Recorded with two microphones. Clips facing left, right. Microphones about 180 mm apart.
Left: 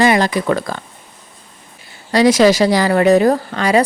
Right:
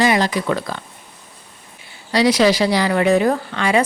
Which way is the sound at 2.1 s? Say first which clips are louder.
Left 4 dB; 45° left (ahead or behind).